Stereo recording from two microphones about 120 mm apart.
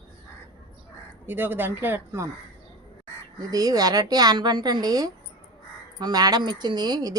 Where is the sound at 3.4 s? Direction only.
30° right (ahead or behind).